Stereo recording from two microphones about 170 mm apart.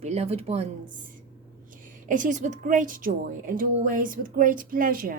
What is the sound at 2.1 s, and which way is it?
A woman's voice, 50° right (ahead or behind).